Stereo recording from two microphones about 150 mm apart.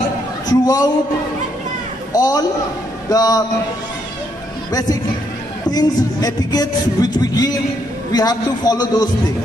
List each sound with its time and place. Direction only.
0.5 s music: 25° left (ahead or behind)
2.1 s music: 25° left (ahead or behind)
5.7 s music: 25° left (ahead or behind)